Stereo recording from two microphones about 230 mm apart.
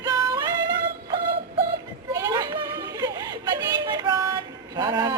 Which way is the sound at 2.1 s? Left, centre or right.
Centre.